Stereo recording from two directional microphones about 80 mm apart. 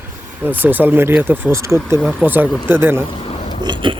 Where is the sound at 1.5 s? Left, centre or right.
Right.